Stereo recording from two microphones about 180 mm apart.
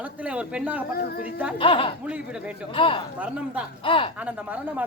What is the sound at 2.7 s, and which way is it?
A child's voice, 30° left (ahead or behind).